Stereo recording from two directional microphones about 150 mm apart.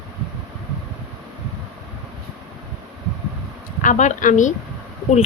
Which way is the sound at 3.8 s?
55° left (ahead or behind).